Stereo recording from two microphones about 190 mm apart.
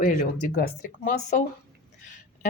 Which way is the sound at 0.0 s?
45° left (ahead or behind).